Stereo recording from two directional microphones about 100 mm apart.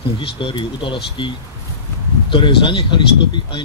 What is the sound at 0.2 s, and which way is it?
Speech, 55° left (ahead or behind).